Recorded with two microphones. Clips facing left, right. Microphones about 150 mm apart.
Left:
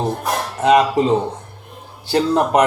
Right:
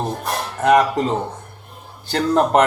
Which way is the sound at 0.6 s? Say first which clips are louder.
Left 1 dB; 15° left (ahead or behind).